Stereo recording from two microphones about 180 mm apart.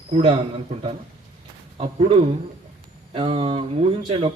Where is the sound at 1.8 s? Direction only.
30° right (ahead or behind).